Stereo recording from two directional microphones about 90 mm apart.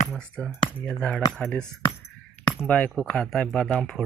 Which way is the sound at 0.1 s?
10° left (ahead or behind).